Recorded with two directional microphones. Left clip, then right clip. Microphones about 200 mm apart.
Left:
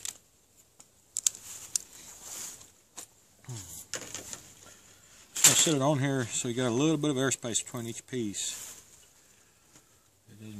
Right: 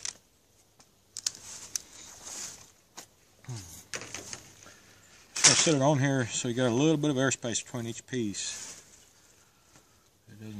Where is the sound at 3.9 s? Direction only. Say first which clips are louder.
Right 1 dB; 5° right (ahead or behind).